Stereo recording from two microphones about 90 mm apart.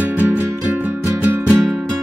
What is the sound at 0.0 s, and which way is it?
Music, 20° right (ahead or behind).